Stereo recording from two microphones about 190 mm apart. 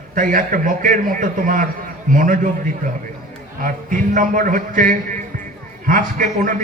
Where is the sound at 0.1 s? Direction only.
45° right (ahead or behind).